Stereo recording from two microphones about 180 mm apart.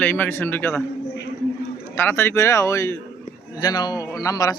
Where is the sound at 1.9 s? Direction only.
10° left (ahead or behind).